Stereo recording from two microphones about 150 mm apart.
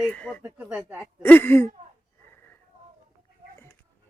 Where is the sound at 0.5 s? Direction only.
10° right (ahead or behind).